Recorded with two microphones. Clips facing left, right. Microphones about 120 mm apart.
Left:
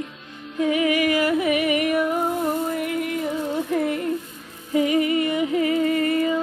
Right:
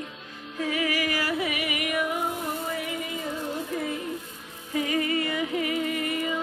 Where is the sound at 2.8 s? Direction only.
65° left (ahead or behind).